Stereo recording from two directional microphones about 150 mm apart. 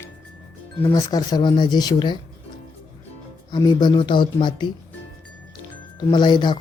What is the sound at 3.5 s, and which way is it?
Speech, 30° left (ahead or behind).